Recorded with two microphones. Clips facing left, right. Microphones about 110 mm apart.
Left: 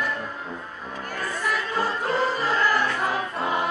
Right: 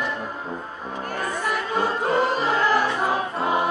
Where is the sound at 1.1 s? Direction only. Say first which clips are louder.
Right 1 dB; 25° right (ahead or behind).